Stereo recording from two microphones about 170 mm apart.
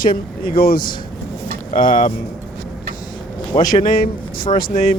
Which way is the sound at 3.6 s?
25° left (ahead or behind).